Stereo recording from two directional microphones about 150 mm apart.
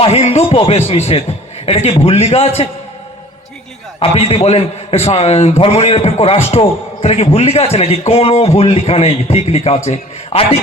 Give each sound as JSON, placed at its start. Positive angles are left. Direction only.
{"t": 0.0, "sound": "a man's voice", "side_deg": 45}
{"t": 4.0, "sound": "a man's voice", "side_deg": 40}